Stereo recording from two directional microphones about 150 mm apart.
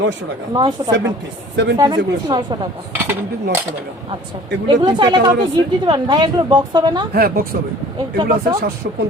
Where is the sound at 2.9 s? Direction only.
15° right (ahead or behind).